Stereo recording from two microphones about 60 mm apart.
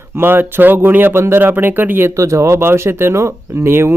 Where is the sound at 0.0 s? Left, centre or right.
Right.